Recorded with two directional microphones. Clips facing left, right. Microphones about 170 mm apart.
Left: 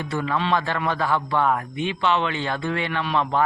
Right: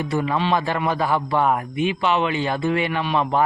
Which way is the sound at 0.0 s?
15° right (ahead or behind).